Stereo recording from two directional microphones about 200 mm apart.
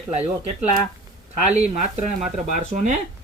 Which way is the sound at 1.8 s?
40° right (ahead or behind).